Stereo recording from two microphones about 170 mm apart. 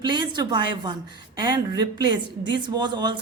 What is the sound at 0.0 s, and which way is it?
A woman's voice, 25° right (ahead or behind).